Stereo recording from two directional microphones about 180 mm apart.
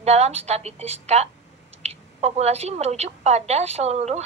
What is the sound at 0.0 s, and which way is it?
Speech, 40° right (ahead or behind).